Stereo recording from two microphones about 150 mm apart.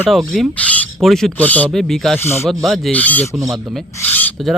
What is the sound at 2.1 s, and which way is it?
Speech, 15° left (ahead or behind).